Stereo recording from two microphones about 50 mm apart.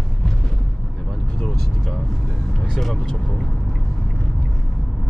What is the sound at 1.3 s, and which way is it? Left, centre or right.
Vehicle, centre.